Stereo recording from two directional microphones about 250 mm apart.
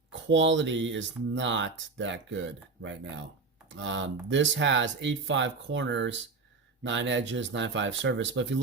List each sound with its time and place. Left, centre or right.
0.3 s speech: right